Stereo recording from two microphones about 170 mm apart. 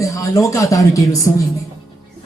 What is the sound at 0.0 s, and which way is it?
Speech, 20° left (ahead or behind).